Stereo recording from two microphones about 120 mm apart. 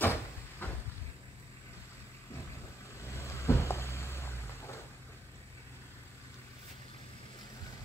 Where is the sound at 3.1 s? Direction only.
25° left (ahead or behind).